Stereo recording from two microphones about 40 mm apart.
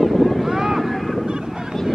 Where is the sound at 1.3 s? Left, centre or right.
Centre.